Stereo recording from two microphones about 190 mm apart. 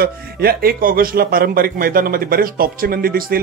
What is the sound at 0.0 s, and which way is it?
Speech, 55° right (ahead or behind).